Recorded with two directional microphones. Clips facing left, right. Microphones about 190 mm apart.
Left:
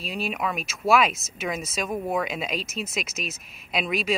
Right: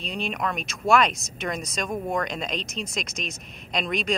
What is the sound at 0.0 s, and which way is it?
Speech, 5° left (ahead or behind).